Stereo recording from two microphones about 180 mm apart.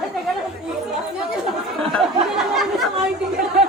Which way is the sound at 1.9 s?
Centre (ahead or behind).